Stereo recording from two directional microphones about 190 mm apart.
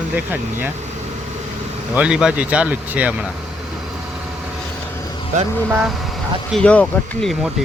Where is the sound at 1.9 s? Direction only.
5° right (ahead or behind).